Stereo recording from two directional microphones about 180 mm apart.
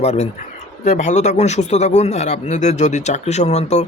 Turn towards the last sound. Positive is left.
turn(degrees=35)  # may be behind; listen again after turning